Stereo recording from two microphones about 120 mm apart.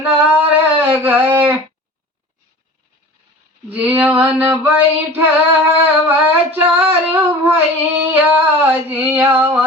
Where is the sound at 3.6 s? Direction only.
15° right (ahead or behind).